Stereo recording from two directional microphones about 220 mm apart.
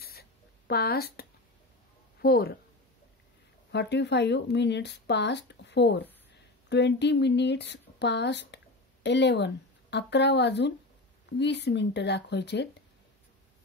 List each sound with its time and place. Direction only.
0.0 s a sound: 45° left (ahead or behind)
2.2 s speech: 45° left (ahead or behind)
3.7 s speech: 50° left (ahead or behind)